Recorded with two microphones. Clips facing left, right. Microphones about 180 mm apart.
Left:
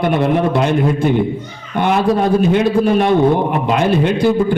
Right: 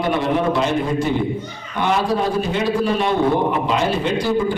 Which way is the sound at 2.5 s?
55° left (ahead or behind).